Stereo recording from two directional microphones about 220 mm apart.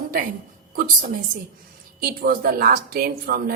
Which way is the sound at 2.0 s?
45° right (ahead or behind).